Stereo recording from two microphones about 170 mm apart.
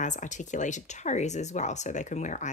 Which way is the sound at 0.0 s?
45° left (ahead or behind).